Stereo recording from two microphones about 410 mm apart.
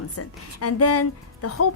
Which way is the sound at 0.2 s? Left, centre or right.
Left.